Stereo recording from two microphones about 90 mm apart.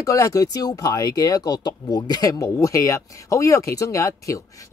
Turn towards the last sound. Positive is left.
turn(degrees=35)  # may be behind; listen again after turning